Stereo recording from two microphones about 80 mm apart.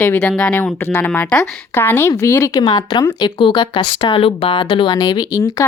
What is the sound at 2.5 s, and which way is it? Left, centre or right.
Speech, left.